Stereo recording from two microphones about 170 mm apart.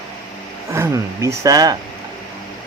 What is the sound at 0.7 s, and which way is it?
Speech, 15° right (ahead or behind).